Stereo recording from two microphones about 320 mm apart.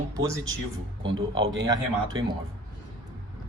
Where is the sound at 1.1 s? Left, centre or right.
Right.